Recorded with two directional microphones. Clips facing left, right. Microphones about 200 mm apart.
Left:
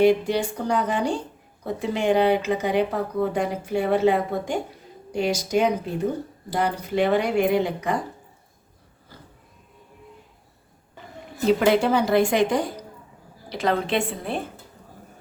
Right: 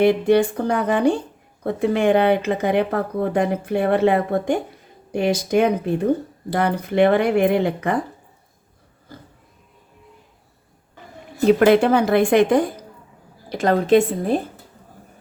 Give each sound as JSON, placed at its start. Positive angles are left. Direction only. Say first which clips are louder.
{"t": 0.0, "sound": "speech", "louder": "right 4 dB", "side_deg": -55}
{"t": 11.6, "sound": "a woman's voice", "louder": "right 5 dB", "side_deg": -55}